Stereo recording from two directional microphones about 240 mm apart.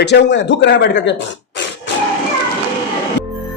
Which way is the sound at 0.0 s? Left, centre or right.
Left.